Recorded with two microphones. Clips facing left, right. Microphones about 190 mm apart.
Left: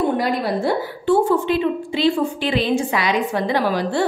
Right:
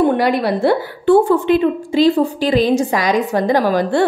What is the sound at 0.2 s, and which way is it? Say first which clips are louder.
A woman's voice: right 5 dB; 70° right (ahead or behind).